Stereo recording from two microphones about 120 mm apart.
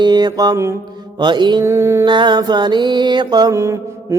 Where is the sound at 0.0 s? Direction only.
35° right (ahead or behind).